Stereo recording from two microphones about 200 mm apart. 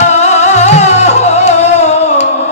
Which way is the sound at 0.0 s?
35° left (ahead or behind).